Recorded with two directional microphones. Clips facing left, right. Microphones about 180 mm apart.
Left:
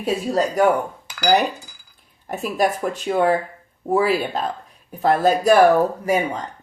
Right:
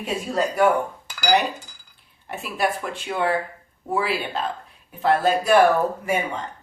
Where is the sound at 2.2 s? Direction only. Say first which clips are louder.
Left 4 dB; 40° left (ahead or behind).